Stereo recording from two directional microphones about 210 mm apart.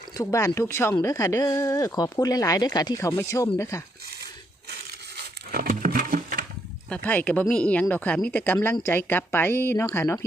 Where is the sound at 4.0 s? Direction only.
45° right (ahead or behind).